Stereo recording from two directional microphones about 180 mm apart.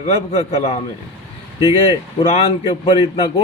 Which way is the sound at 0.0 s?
35° left (ahead or behind).